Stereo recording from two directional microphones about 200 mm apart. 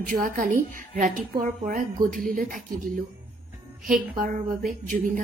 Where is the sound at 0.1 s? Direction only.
40° right (ahead or behind).